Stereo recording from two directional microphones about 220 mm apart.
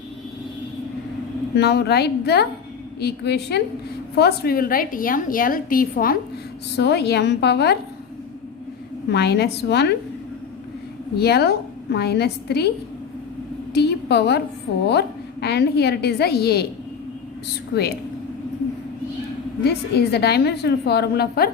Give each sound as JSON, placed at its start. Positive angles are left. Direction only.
{"t": 1.5, "sound": "a woman's voice", "side_deg": 50}
{"t": 9.0, "sound": "a woman's voice", "side_deg": 50}
{"t": 11.2, "sound": "a woman's voice", "side_deg": 45}
{"t": 13.7, "sound": "a sound", "side_deg": 50}
{"t": 14.8, "sound": "a woman's voice", "side_deg": 50}
{"t": 19.6, "sound": "a woman's voice", "side_deg": 45}